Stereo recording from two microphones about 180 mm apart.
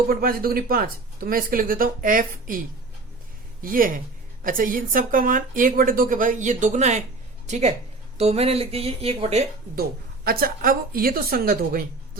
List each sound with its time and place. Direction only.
0.1 s speech: 55° right (ahead or behind)
3.6 s speech: 50° right (ahead or behind)
8.2 s speech: 35° right (ahead or behind)
10.2 s a woman's voice: 55° right (ahead or behind)